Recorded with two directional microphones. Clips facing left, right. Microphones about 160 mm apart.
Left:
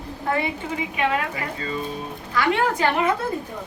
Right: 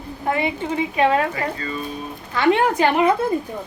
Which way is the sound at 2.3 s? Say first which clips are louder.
Right 4 dB; 20° right (ahead or behind).